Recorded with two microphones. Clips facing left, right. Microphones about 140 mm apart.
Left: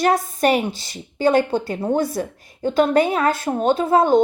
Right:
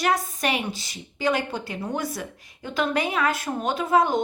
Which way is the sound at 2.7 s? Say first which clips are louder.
Left 7 dB; 40° left (ahead or behind).